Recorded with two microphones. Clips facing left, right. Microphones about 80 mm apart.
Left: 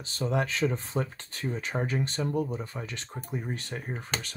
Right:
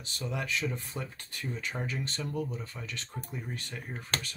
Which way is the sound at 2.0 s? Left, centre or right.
Left.